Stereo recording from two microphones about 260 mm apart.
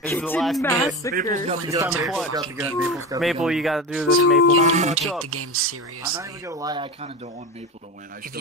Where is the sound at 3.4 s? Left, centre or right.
Centre.